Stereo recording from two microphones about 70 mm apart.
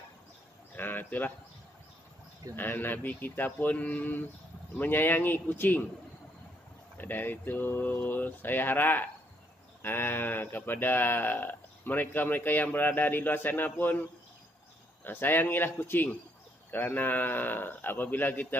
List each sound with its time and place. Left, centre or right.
0.7 s a sound: left
2.5 s speech: left
7.0 s speech: left
15.0 s speech: left